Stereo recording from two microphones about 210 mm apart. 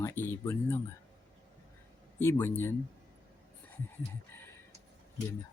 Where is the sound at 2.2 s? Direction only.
10° left (ahead or behind).